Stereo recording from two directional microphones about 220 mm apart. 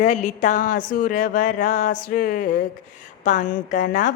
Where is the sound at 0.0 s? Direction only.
35° left (ahead or behind).